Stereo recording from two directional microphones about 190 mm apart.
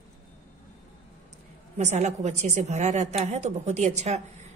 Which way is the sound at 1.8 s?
35° right (ahead or behind).